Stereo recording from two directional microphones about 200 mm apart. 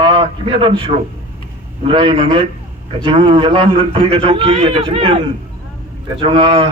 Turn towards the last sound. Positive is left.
turn(degrees=-25)  # may be behind; listen again after turning